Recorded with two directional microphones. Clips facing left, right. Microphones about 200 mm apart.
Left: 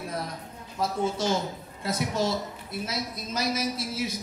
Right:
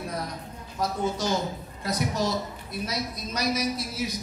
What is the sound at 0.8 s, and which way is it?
A woman's voice, 25° left (ahead or behind).